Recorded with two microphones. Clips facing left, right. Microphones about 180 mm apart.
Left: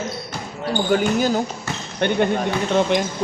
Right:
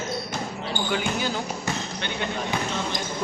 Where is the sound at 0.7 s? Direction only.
45° left (ahead or behind).